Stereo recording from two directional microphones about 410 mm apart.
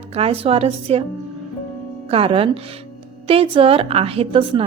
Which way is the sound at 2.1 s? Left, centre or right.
Centre.